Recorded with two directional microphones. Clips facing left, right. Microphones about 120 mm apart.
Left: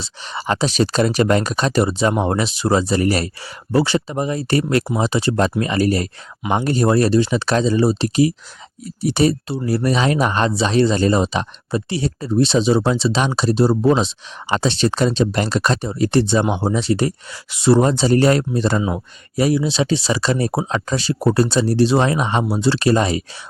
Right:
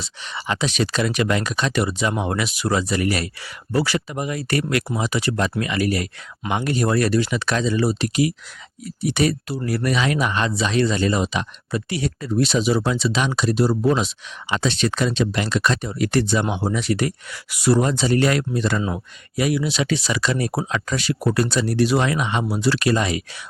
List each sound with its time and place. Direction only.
0.0 s speech: 35° left (ahead or behind)
18.8 s speech: 20° left (ahead or behind)
19.4 s speech: 30° left (ahead or behind)